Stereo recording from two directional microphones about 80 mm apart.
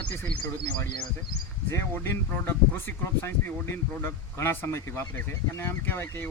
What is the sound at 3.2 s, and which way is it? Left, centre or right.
Speech, left.